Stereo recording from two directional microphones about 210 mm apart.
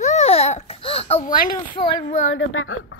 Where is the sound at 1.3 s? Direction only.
40° left (ahead or behind).